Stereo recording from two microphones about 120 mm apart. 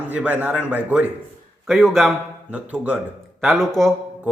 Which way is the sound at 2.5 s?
15° right (ahead or behind).